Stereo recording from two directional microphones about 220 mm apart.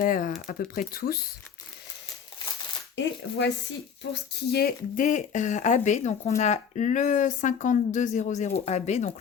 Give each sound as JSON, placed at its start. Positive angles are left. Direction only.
{"t": 0.0, "sound": "speech", "side_deg": 40}
{"t": 2.9, "sound": "speech", "side_deg": 55}
{"t": 4.9, "sound": "speech", "side_deg": 35}